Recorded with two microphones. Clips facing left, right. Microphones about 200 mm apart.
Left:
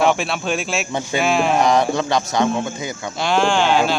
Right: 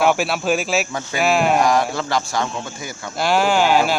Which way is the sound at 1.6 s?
20° left (ahead or behind).